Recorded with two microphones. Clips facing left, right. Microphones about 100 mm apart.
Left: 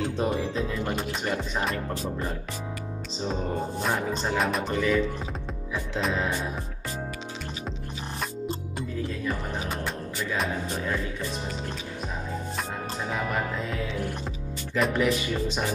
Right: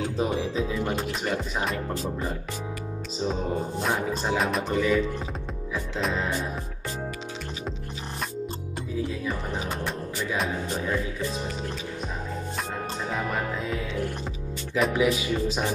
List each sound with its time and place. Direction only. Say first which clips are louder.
0.0 s speech: even; centre (ahead or behind)
3.8 s speech: even; centre (ahead or behind)
10.3 s music: even; centre (ahead or behind)
13.1 s music: even; centre (ahead or behind)
14.7 s speech: right 1 dB; centre (ahead or behind)